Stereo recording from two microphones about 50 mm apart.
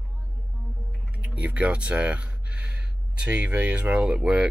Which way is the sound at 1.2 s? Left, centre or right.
Right.